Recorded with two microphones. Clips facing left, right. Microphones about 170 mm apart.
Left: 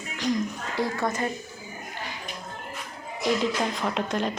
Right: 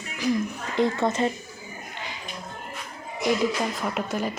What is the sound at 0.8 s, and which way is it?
Speech, 25° right (ahead or behind).